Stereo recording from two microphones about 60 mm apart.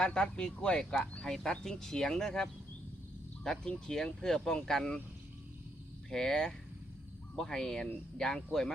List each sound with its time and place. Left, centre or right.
0.0 s speech: centre
6.1 s speech: centre